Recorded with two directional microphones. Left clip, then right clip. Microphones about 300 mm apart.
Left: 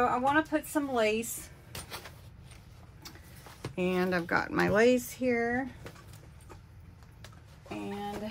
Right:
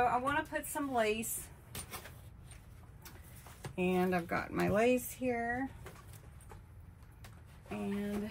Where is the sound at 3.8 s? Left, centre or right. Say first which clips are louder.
Left 3 dB; left.